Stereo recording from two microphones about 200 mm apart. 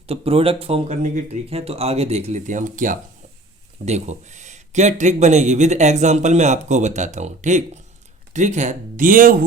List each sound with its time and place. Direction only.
0.1 s speech: 30° right (ahead or behind)